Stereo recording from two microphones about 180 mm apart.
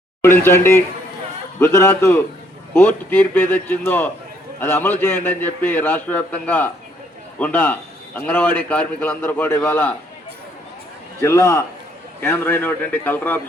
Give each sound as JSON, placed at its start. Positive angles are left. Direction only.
{"t": 0.2, "sound": "a man's voice", "side_deg": 15}
{"t": 11.2, "sound": "a man's voice", "side_deg": 15}